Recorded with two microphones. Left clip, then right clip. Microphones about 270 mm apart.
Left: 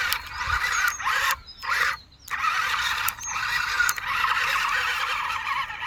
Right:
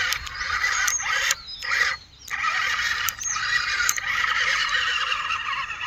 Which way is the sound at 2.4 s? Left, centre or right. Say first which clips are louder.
Right 1 dB; centre.